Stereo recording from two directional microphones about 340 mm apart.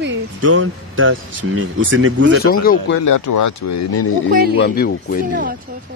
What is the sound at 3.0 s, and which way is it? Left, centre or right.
Speech, left.